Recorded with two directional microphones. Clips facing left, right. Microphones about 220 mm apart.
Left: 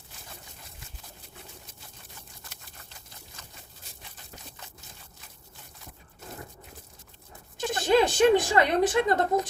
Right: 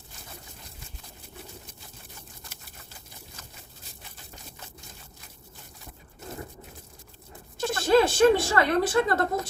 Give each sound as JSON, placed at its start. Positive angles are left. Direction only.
{"t": 7.7, "sound": "speech", "side_deg": 15}